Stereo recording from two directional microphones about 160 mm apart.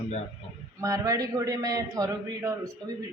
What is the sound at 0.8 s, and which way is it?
A woman's voice, 20° right (ahead or behind).